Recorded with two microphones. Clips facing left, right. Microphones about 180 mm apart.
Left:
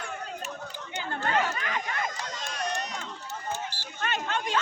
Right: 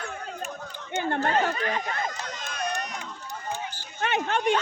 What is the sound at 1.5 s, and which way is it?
Speech, 30° right (ahead or behind).